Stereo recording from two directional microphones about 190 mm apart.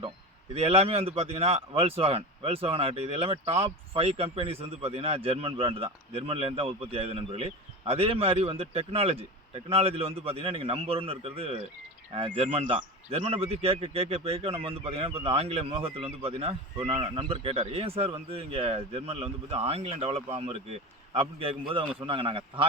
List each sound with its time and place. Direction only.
0.5 s a man's voice: 30° right (ahead or behind)